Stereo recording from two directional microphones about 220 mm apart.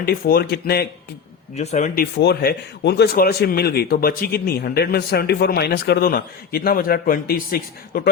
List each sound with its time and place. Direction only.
0.0 s a man's voice: 45° left (ahead or behind)
1.5 s speech: 30° left (ahead or behind)
2.1 s a man's voice: 45° left (ahead or behind)